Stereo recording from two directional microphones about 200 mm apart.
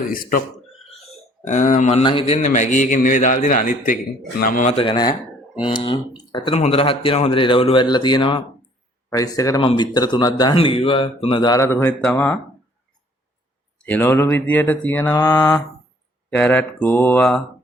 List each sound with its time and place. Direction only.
0.1 s speech: 45° left (ahead or behind)
1.5 s a man's voice: 40° left (ahead or behind)
9.0 s mantra: 15° left (ahead or behind)
9.6 s speech: 25° left (ahead or behind); by 12.4 s 5° left (ahead or behind)
13.7 s mantra: 10° left (ahead or behind)